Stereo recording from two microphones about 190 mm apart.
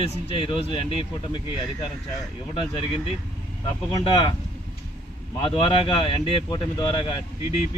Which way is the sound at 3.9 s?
25° left (ahead or behind).